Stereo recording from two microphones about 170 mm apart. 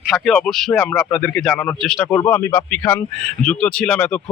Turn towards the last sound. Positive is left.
turn(degrees=5)  # may be behind; listen again after turning